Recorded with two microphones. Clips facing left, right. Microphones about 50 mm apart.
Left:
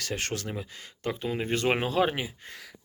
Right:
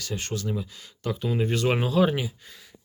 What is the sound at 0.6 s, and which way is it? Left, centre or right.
Speech, left.